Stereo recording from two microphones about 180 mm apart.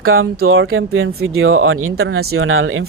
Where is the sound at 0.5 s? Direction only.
90° right.